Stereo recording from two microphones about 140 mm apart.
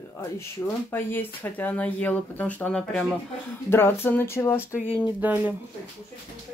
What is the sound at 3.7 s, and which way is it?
Speech, 15° left (ahead or behind).